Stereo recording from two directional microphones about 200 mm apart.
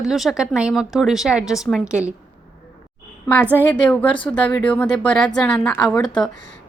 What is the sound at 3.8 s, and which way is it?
Speech, 5° left (ahead or behind).